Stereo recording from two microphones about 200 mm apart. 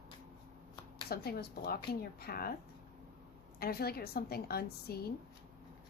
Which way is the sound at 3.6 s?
50° left (ahead or behind).